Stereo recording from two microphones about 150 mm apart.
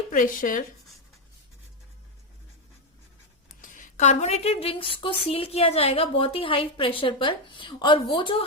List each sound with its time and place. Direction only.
0.1 s speech: 65° left (ahead or behind)
3.6 s a woman's voice: 55° left (ahead or behind); by 8.4 s 35° left (ahead or behind)